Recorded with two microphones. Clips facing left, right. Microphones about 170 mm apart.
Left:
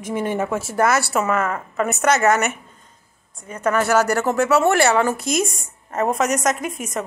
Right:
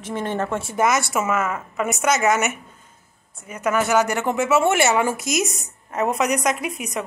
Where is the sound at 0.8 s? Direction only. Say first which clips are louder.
Left 1 dB; 15° right (ahead or behind).